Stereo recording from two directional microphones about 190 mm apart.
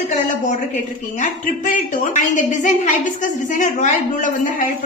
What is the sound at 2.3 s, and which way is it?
A woman's voice, 40° left (ahead or behind).